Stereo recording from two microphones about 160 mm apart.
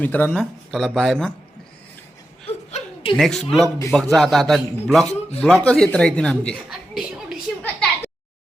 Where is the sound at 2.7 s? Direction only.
45° left (ahead or behind).